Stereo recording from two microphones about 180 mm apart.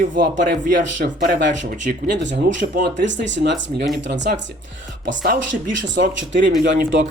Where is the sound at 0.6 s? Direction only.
45° right (ahead or behind).